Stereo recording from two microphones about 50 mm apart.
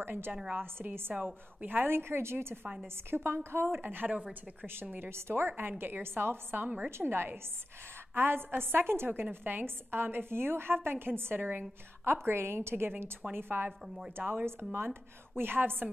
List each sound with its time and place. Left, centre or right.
0.0 s a woman's voice: right
1.2 s a woman's voice: right
1.9 s a woman's voice: right
5.1 s a woman's voice: right
5.6 s a woman's voice: right